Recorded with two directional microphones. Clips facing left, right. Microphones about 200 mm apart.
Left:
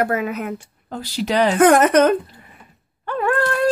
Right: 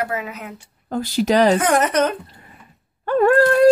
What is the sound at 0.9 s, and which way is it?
Speech, 50° right (ahead or behind).